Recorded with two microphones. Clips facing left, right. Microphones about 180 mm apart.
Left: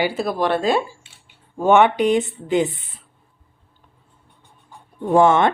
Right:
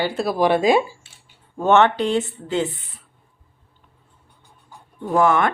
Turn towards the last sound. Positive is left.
turn(degrees=25)  # may be behind; listen again after turning